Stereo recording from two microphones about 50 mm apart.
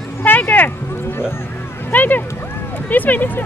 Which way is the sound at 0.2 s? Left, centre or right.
Left.